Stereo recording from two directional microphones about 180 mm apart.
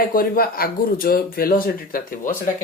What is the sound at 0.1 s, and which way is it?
Speech, 55° left (ahead or behind).